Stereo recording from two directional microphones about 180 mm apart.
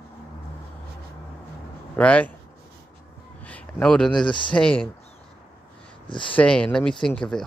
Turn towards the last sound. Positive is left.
turn(degrees=5)  # may be behind; listen again after turning